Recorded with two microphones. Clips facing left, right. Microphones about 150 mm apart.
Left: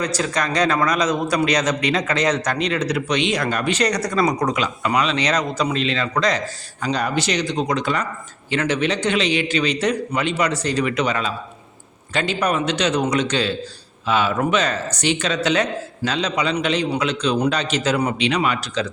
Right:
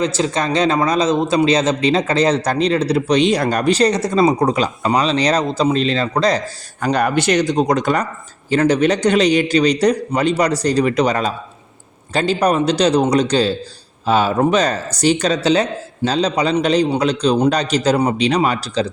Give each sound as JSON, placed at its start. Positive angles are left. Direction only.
{"t": 0.0, "sound": "a man's voice", "side_deg": -25}
{"t": 6.8, "sound": "a man's voice", "side_deg": -55}